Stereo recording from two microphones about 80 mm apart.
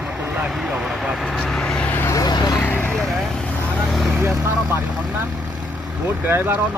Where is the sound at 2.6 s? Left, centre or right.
Left.